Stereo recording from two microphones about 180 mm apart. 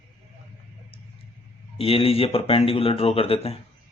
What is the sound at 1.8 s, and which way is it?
Speech, 30° left (ahead or behind).